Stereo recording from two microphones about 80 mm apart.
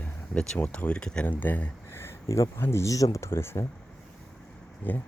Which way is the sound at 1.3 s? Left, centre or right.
Left.